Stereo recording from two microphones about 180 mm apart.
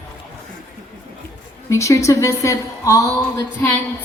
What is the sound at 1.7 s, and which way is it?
A woman's voice, 15° left (ahead or behind).